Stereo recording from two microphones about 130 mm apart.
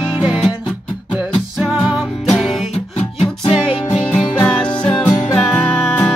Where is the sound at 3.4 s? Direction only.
45° left (ahead or behind).